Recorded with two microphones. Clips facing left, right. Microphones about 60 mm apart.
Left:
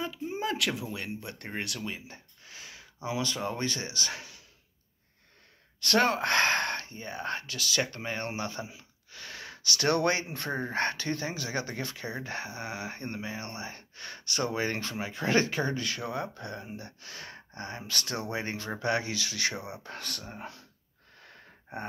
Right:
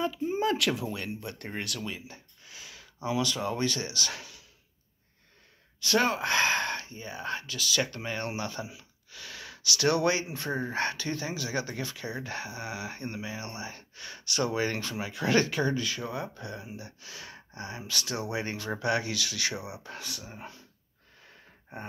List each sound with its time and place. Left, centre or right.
0.0 s speech: centre
1.0 s speech: left
5.8 s speech: left
7.8 s speech: left
19.7 s speech: left
21.7 s speech: left